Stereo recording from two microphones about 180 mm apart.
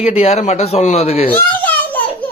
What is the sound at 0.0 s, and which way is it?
A man's voice, 35° left (ahead or behind).